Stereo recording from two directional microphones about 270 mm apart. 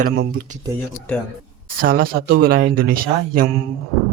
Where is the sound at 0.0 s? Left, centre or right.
Right.